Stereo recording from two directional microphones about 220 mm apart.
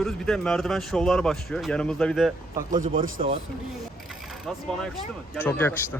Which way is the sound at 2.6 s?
35° right (ahead or behind).